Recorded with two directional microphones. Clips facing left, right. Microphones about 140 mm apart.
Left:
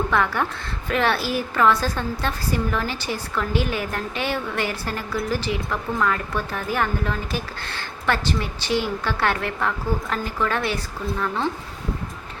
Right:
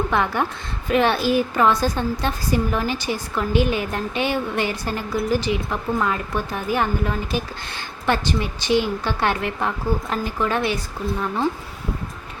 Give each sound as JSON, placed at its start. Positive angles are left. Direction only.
{"t": 0.1, "sound": "a woman's voice", "side_deg": -20}